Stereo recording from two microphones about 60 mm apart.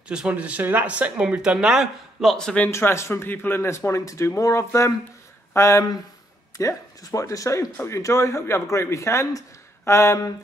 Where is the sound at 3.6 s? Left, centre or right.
Left.